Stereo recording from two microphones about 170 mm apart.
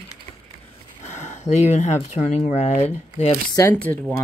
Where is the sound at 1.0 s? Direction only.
45° left (ahead or behind).